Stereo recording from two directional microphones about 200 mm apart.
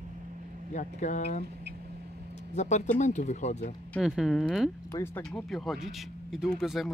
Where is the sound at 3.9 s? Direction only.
Centre (ahead or behind).